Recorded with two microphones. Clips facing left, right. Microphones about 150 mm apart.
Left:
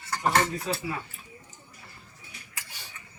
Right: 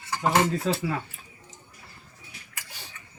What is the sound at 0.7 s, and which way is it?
Speech, 90° right.